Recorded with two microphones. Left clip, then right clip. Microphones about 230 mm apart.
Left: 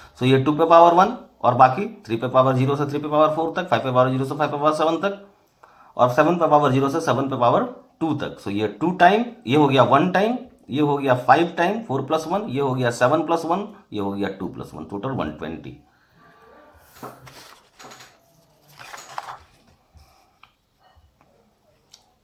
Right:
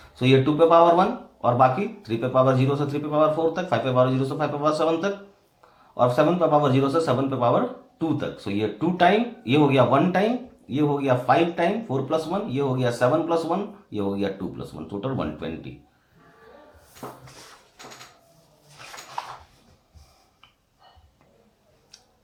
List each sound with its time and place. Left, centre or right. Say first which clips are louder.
0.3 s speech: left 3 dB; left